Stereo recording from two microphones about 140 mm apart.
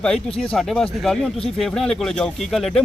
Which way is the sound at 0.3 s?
5° left (ahead or behind).